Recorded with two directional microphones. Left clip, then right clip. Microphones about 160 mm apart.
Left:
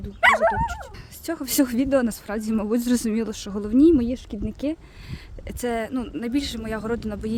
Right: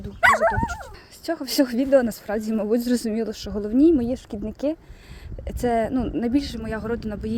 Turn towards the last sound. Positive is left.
turn(degrees=15)  # may be behind; listen again after turning